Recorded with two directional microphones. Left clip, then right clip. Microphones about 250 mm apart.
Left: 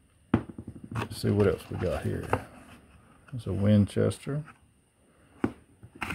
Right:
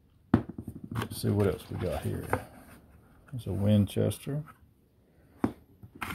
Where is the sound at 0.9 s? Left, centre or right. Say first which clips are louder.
Left 3 dB; centre.